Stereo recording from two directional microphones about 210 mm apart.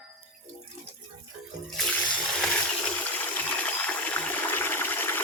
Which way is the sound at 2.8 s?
10° left (ahead or behind).